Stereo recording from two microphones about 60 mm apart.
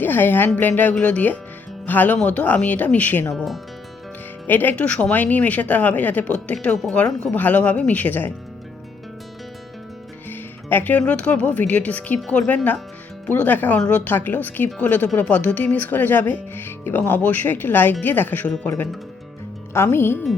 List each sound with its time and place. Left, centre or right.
0.0 s speech: left
3.3 s speech: centre
4.4 s speech: left
4.9 s speech: centre
10.2 s music: left
11.0 s speech: centre
14.1 s speech: left
19.7 s speech: left